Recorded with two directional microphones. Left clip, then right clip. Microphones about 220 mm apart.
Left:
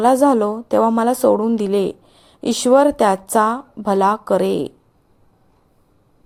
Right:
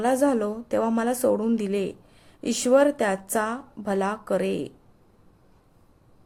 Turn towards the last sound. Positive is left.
turn(degrees=15)  # may be behind; listen again after turning